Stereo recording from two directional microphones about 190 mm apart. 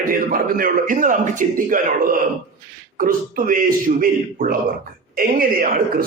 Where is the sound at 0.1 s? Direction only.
50° right (ahead or behind).